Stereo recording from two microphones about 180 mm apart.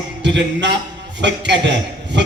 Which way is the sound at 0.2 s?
75° right (ahead or behind).